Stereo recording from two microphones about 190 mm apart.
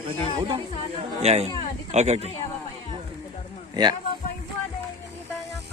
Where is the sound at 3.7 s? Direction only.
20° right (ahead or behind).